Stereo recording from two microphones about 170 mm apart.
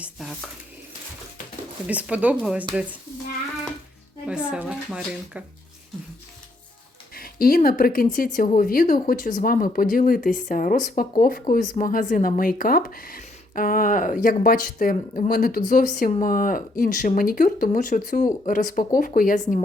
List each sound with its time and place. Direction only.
0.0 s speech: centre (ahead or behind)
1.9 s speech: 10° right (ahead or behind)
4.3 s speech: 5° right (ahead or behind)
7.2 s speech: 60° left (ahead or behind)